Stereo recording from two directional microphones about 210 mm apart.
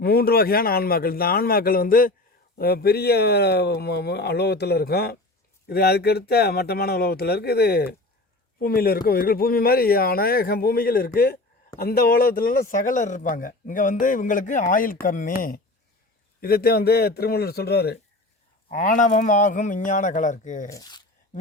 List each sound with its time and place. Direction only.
0.0 s speech: 50° left (ahead or behind)
18.7 s speech: 40° left (ahead or behind)
20.7 s speech: 15° left (ahead or behind)